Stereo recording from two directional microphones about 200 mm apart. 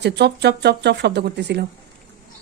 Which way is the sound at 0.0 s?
55° right (ahead or behind).